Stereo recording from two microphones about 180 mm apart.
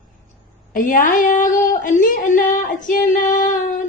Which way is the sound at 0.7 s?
50° left (ahead or behind).